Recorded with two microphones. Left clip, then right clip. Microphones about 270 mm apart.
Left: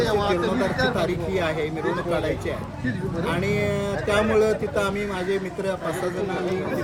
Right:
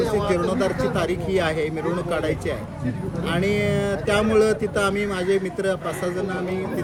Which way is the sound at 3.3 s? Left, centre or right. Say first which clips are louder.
Right 2 dB; centre.